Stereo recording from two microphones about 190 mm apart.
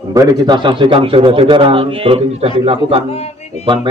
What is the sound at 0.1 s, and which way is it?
Speech, 20° right (ahead or behind).